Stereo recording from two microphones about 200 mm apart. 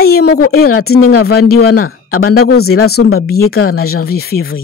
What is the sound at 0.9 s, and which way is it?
Speech, 90° left.